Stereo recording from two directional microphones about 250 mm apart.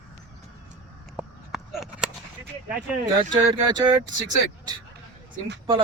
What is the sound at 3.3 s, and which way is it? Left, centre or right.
Speech, centre.